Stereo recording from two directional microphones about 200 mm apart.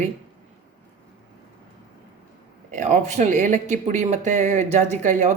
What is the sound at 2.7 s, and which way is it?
Speech, 40° right (ahead or behind).